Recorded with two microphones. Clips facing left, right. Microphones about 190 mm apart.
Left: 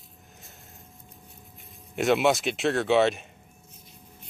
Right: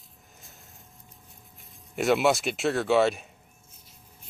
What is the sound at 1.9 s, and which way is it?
Speech, centre (ahead or behind).